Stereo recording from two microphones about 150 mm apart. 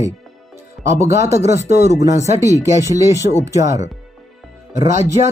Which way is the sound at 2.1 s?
50° left (ahead or behind).